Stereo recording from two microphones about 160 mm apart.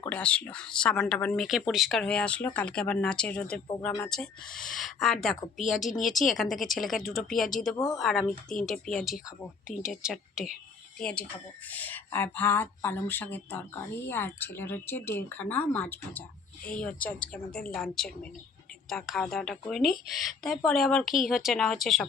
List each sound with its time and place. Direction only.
0.0 s speech: 10° left (ahead or behind)